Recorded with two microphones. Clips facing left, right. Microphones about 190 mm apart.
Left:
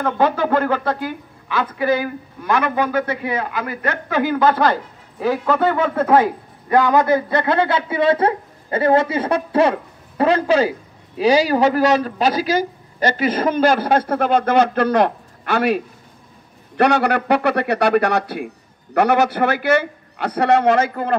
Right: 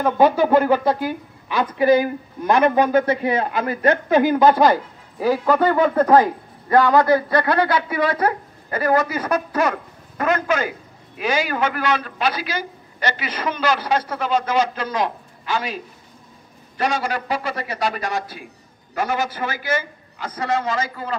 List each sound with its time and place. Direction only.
0.0 s speech: 10° right (ahead or behind)
5.2 s a man's voice: 5° right (ahead or behind)
6.7 s a man's voice: 15° left (ahead or behind); by 21.2 s 60° left (ahead or behind)